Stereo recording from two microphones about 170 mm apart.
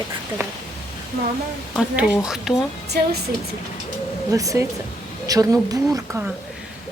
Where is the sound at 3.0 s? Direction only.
65° right (ahead or behind).